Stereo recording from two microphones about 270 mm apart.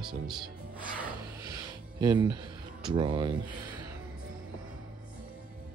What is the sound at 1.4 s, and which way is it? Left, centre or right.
Music, centre.